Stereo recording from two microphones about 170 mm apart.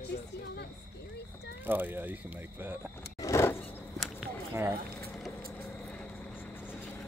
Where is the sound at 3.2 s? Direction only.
15° left (ahead or behind).